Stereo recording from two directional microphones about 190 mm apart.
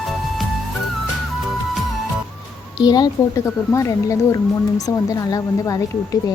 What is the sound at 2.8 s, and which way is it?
Speech, 20° left (ahead or behind).